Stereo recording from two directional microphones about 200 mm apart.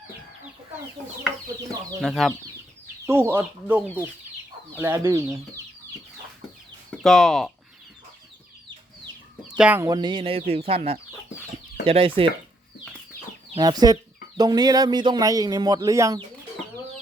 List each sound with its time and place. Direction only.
2.0 s speech: centre (ahead or behind)
3.1 s speech: 10° right (ahead or behind)
6.9 s speech: centre (ahead or behind)
9.6 s speech: 10° right (ahead or behind); by 12.3 s 25° right (ahead or behind)
13.6 s speech: 20° right (ahead or behind)